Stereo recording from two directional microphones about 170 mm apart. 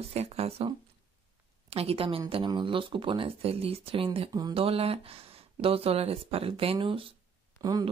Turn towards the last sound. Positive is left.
turn(degrees=-20)  # may be behind; listen again after turning